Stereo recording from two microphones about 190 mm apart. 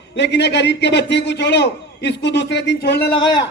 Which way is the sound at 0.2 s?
65° left (ahead or behind).